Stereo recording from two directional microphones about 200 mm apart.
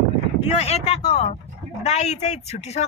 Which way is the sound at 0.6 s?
30° left (ahead or behind).